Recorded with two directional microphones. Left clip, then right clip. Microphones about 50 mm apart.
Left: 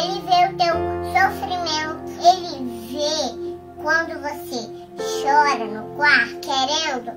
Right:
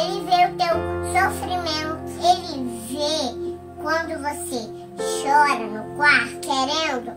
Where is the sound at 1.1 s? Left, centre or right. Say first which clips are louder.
Left 2 dB; right.